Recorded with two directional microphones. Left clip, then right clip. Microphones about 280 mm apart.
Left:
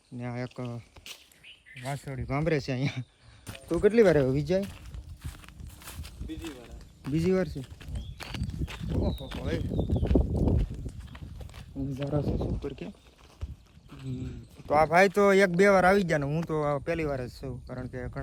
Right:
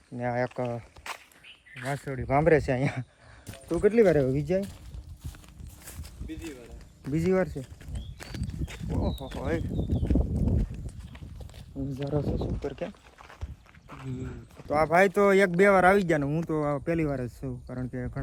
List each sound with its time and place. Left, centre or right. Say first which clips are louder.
0.2 s speech: right 9 dB; centre
2.2 s speech: right 7 dB; centre
3.8 s speech: even; centre
5.8 s a sound: left 2 dB; centre
7.3 s walk: right 2 dB; centre
9.6 s speech: left 1 dB; centre
12.0 s speech: right 1 dB; centre
12.6 s speech: right 4 dB; centre
14.7 s speech: left 1 dB; centre